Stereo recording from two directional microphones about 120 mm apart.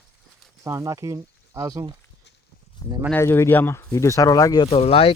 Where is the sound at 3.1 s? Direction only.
20° left (ahead or behind).